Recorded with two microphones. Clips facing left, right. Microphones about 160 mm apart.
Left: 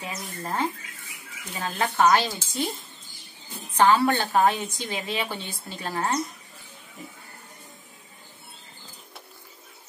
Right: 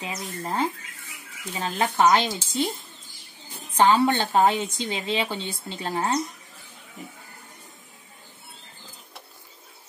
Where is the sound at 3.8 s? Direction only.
20° right (ahead or behind).